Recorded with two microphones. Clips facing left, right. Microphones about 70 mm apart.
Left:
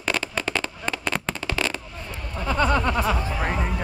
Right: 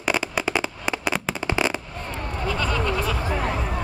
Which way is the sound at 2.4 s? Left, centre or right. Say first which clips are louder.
Left 4 dB; left.